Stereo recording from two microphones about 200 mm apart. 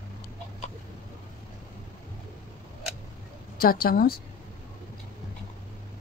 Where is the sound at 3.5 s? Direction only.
50° left (ahead or behind).